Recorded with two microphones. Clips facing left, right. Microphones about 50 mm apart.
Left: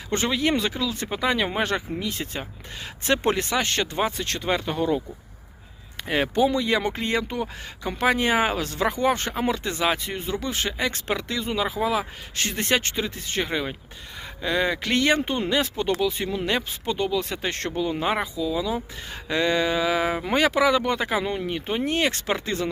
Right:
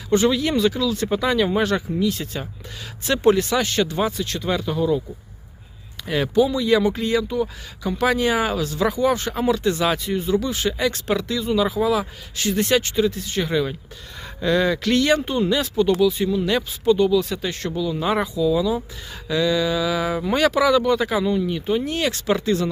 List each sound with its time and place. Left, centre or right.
0.3 s speech: left
1.0 s speech: centre; by 4.9 s left
6.0 s a sound: left
6.3 s speech: left
9.4 s speech: left
18.0 s speech: left
19.1 s speech: left